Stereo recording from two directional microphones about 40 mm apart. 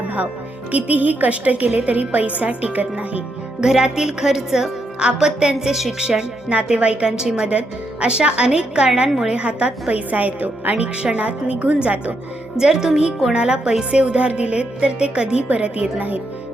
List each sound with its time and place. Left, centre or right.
0.7 s a woman's voice: right
3.6 s a woman's voice: centre
6.0 s a woman's voice: right
9.3 s a woman's voice: right
9.9 s a woman's voice: right
10.9 s a woman's voice: right
12.5 s a woman's voice: centre; by 16.1 s right